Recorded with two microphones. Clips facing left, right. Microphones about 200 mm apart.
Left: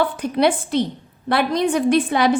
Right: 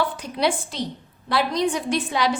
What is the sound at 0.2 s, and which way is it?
A woman's voice, 55° left (ahead or behind).